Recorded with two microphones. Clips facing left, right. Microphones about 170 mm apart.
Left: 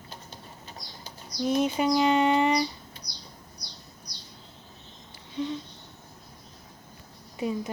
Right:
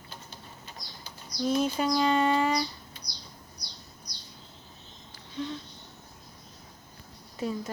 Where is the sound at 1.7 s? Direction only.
15° left (ahead or behind).